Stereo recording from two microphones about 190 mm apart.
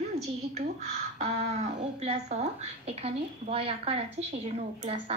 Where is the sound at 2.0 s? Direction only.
35° right (ahead or behind).